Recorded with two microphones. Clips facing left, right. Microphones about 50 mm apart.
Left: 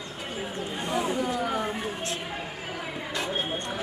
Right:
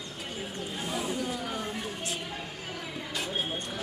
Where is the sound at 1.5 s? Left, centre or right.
Centre.